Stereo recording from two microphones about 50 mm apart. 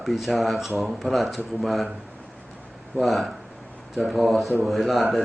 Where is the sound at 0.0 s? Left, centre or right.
Centre.